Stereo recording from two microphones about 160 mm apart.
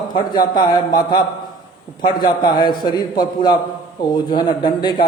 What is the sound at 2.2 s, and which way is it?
A man's voice, 25° left (ahead or behind).